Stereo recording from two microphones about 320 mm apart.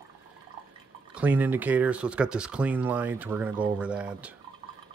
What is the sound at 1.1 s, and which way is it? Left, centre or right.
Speech, centre.